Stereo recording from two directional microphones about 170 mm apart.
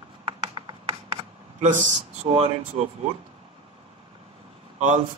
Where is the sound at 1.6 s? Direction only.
45° right (ahead or behind).